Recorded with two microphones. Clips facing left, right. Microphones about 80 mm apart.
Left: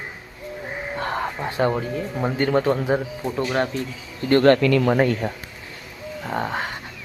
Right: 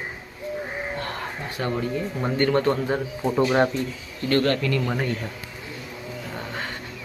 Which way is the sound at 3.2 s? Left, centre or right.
Centre.